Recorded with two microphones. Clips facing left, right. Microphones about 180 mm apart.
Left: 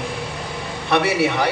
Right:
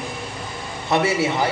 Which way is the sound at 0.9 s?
70° left (ahead or behind).